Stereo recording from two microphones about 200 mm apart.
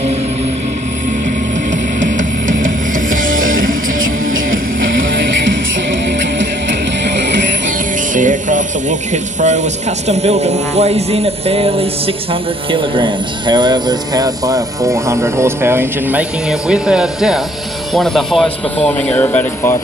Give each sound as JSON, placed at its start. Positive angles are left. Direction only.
{"t": 1.7, "sound": "music", "side_deg": -40}
{"t": 4.0, "sound": "music", "side_deg": -80}
{"t": 7.6, "sound": "speech", "side_deg": -40}